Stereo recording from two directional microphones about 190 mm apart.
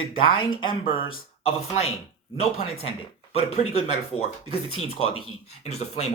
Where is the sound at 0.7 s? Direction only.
25° left (ahead or behind).